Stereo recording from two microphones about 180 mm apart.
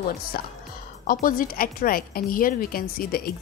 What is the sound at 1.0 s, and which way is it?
A woman's voice, 50° left (ahead or behind).